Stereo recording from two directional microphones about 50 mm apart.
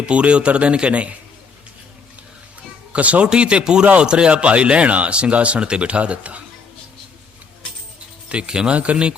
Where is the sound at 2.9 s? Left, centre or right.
Right.